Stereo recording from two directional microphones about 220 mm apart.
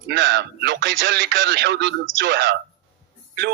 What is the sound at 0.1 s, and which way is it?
Speech, 55° right (ahead or behind).